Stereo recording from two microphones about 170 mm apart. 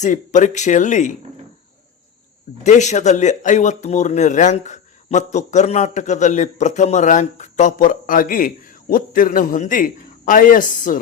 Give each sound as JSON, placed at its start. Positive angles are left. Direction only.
{"t": 0.0, "sound": "speech", "side_deg": 45}
{"t": 2.6, "sound": "speech", "side_deg": 45}